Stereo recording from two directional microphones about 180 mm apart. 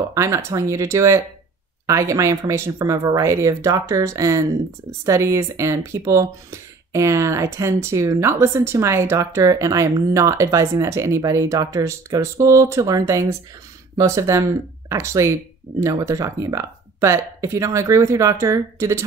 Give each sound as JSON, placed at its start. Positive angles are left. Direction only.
{"t": 0.1, "sound": "speech", "side_deg": -15}